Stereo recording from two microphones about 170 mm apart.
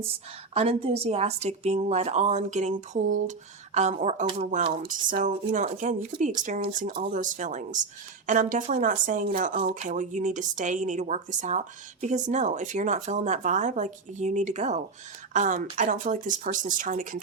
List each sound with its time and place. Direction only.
0.5 s speech: 35° right (ahead or behind)